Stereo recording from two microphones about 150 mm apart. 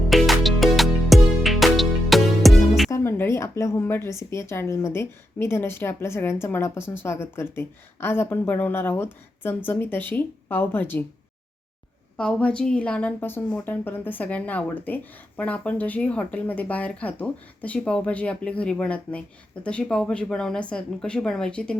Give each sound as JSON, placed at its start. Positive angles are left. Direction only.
{"t": 0.1, "sound": "music", "side_deg": 0}
{"t": 2.9, "sound": "a woman's voice", "side_deg": 15}
{"t": 12.1, "sound": "a woman's voice", "side_deg": 5}